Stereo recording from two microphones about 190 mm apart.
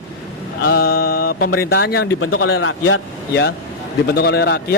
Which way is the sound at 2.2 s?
90° left.